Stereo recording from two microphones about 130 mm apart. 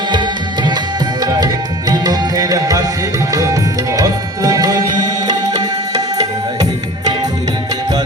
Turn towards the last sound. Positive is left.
turn(degrees=-30)  # may be behind; listen again after turning